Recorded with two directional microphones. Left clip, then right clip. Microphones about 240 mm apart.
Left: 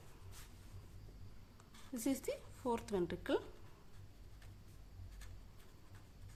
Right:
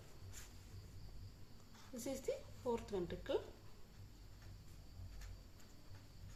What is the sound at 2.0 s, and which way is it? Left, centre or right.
A woman's voice, left.